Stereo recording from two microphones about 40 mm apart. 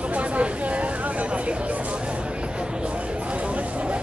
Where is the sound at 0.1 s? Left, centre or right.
Right.